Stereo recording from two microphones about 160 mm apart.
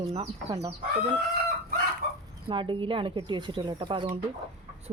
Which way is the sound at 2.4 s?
30° right (ahead or behind).